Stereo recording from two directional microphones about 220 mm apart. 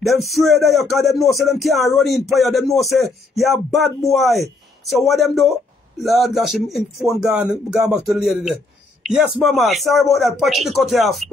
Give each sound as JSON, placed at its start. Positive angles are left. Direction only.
{"t": 0.0, "sound": "speech", "side_deg": 0}